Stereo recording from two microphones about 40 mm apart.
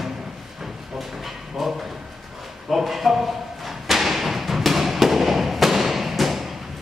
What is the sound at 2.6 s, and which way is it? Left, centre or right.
Thump, centre.